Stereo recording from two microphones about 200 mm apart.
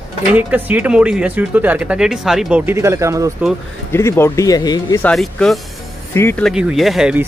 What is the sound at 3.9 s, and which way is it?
Speech, 15° left (ahead or behind).